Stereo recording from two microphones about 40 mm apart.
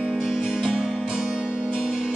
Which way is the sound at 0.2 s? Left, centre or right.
Centre.